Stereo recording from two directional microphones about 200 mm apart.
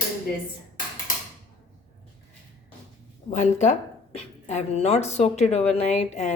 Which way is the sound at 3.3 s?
35° left (ahead or behind).